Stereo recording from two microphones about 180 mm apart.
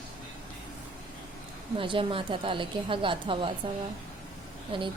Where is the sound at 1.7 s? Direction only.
30° right (ahead or behind).